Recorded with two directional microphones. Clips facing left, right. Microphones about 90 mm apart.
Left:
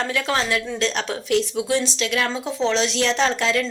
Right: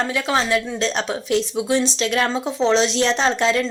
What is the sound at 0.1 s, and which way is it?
A woman's voice, 20° right (ahead or behind).